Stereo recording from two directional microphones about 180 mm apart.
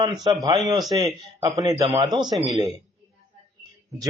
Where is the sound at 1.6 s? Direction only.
20° right (ahead or behind).